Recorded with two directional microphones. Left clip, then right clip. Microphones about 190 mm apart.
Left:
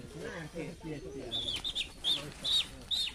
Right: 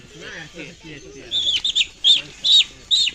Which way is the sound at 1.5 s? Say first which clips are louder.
Right 17 dB; 50° left (ahead or behind).